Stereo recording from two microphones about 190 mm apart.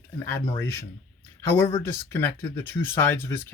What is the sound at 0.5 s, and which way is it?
Speech, 15° left (ahead or behind).